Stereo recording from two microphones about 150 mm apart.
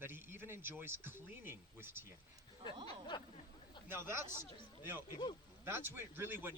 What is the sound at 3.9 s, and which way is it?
Speech, 15° right (ahead or behind).